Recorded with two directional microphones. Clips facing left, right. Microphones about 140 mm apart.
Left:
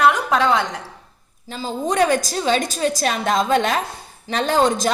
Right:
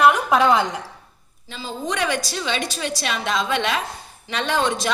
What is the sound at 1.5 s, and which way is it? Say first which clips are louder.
A woman's voice: left 6 dB; 40° left (ahead or behind).